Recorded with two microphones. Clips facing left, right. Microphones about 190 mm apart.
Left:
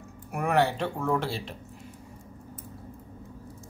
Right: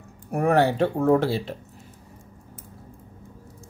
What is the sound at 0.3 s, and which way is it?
Speech, 35° right (ahead or behind).